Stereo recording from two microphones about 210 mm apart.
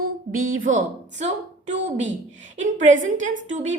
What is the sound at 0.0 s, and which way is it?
A woman's voice, 75° right (ahead or behind).